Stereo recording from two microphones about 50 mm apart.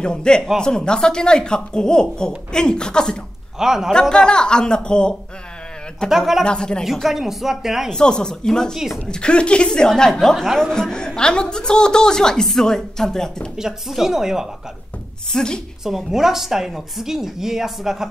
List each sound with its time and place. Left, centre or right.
0.0 s a woman's voice: centre
3.5 s a woman's voice: centre
4.1 s a woman's voice: centre
6.0 s a woman's voice: centre
6.4 s speech: centre
6.8 s speech: centre
7.9 s a woman's voice: centre
8.7 s a woman's voice: centre
9.0 s a woman's voice: centre
13.6 s a woman's voice: centre
15.3 s a woman's voice: centre
15.8 s a woman's voice: centre